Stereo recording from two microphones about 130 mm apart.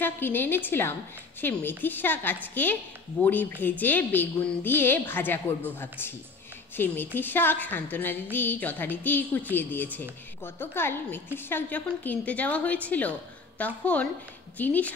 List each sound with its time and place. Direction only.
0.0 s a woman's voice: 15° left (ahead or behind)